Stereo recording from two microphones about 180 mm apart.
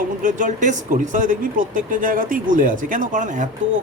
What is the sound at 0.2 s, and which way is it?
Speech, 45° right (ahead or behind).